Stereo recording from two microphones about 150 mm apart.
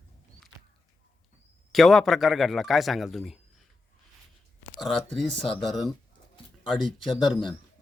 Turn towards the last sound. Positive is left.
turn(degrees=0)  # may be behind; listen again after turning